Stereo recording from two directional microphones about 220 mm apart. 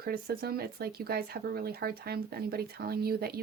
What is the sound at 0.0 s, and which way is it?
Speech, 45° right (ahead or behind).